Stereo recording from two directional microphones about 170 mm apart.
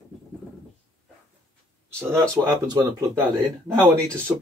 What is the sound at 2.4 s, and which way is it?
Speech, 20° right (ahead or behind).